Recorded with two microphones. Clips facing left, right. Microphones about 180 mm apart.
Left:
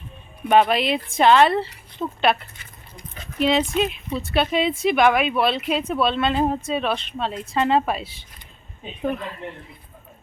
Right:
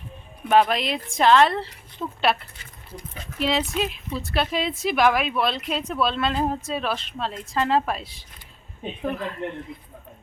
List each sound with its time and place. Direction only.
0.4 s speech: centre (ahead or behind)